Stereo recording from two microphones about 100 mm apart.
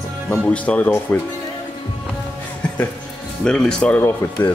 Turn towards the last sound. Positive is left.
turn(degrees=25)  # may be behind; listen again after turning